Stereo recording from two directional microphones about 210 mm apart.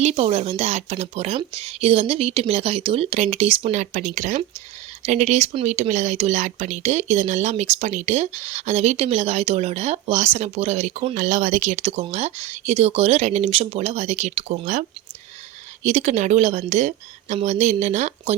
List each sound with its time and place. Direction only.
0.0 s speech: 30° right (ahead or behind)